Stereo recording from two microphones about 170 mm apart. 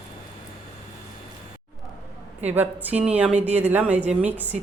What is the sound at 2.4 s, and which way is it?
A woman's voice, 10° right (ahead or behind).